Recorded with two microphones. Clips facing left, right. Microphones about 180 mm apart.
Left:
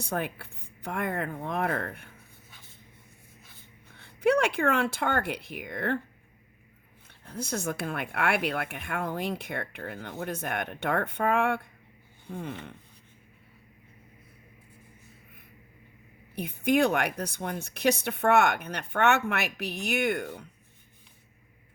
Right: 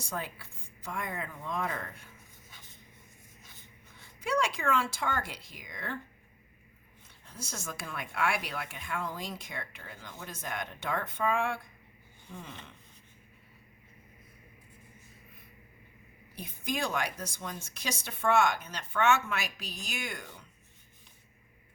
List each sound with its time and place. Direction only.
0.0 s speech: 60° left (ahead or behind)
3.9 s speech: 60° left (ahead or behind)
7.1 s speech: 60° left (ahead or behind)
16.3 s speech: 65° left (ahead or behind)